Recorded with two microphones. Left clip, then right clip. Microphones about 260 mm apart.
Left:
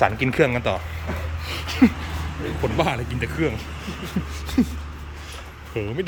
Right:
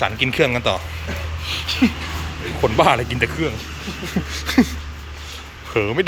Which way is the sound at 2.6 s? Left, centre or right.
Centre.